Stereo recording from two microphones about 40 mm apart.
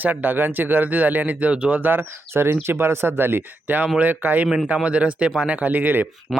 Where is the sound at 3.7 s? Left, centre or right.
Right.